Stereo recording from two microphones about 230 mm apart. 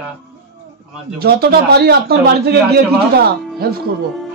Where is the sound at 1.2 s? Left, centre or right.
Right.